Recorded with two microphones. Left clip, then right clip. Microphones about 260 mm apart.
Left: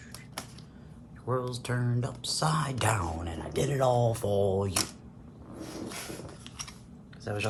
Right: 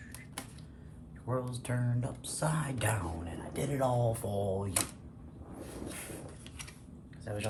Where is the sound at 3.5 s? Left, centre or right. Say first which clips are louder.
Left 6 dB; left.